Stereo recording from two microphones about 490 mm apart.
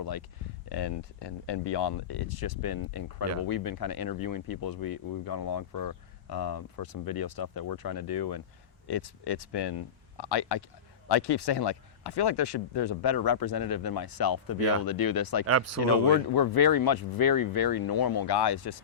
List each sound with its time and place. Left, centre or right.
0.0 s speech: left
15.4 s speech: right
16.3 s speech: left